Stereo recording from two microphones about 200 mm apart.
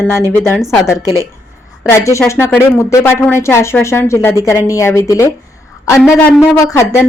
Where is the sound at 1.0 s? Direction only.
15° right (ahead or behind).